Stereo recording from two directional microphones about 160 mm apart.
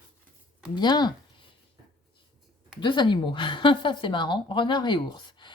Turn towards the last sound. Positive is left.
turn(degrees=30)  # may be behind; listen again after turning